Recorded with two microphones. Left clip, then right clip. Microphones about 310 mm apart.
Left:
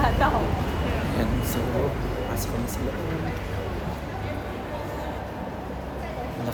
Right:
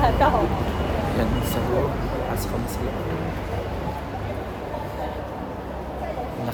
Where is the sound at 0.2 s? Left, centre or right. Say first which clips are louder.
Right 4 dB; right.